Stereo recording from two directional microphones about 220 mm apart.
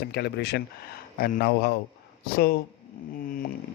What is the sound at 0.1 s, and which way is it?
Speech, 50° left (ahead or behind).